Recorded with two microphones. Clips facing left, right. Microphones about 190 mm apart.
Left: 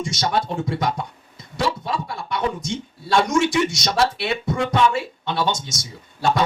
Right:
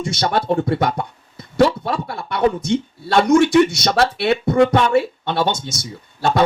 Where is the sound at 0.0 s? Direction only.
60° right (ahead or behind).